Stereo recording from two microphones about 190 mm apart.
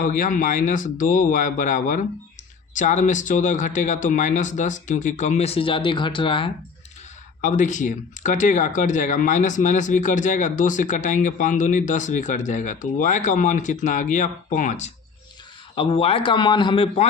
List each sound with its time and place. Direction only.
0.0 s speech: 45° left (ahead or behind); by 6.5 s 25° left (ahead or behind)
7.4 s speech: 40° left (ahead or behind)
15.7 s speech: 30° left (ahead or behind)